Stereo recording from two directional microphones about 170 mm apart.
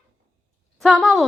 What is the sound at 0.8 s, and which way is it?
Speech, centre (ahead or behind).